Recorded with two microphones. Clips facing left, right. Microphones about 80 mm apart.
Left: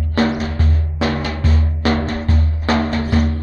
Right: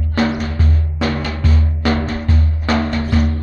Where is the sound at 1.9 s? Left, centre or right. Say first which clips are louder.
Even; centre.